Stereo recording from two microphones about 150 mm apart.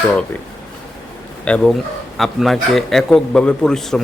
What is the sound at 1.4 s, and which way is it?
A man's voice, 5° left (ahead or behind).